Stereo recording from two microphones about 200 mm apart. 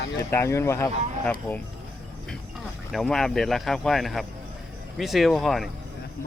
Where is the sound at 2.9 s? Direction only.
Centre (ahead or behind).